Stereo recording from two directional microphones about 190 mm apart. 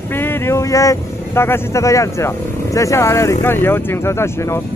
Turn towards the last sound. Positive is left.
turn(degrees=15)  # may be behind; listen again after turning